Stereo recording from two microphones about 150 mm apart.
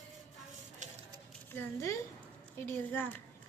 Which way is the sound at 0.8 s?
55° right (ahead or behind).